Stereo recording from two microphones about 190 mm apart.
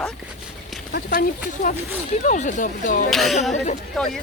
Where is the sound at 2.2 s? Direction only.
40° left (ahead or behind).